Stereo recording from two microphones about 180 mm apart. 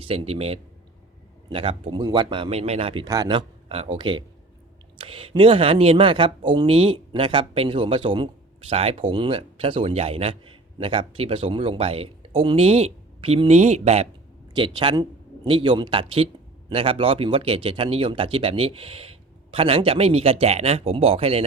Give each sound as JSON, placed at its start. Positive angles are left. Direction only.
{"t": 0.0, "sound": "speech", "side_deg": -35}